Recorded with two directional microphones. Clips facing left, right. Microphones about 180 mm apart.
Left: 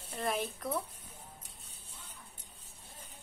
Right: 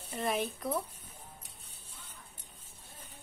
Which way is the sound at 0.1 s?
Centre (ahead or behind).